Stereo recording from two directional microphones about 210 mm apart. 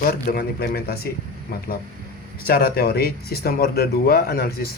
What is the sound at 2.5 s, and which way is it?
Speech, 45° left (ahead or behind).